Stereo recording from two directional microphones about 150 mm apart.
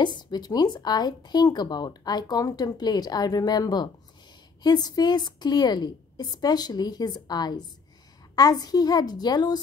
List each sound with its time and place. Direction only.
0.0 s speech: 30° left (ahead or behind)